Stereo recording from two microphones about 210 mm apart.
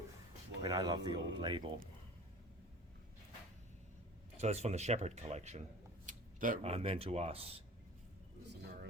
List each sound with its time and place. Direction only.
0.6 s speech: 20° right (ahead or behind)
4.4 s speech: 30° right (ahead or behind)
8.4 s a sound: 55° right (ahead or behind)